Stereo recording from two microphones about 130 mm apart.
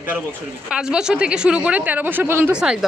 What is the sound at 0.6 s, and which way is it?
A woman's voice, 5° right (ahead or behind).